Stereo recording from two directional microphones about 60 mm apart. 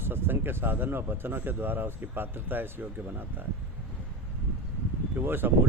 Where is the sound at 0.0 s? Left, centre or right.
Right.